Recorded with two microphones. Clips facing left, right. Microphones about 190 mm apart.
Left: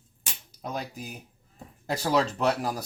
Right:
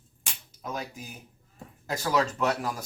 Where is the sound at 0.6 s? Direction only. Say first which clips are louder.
Left 1 dB; 35° left (ahead or behind).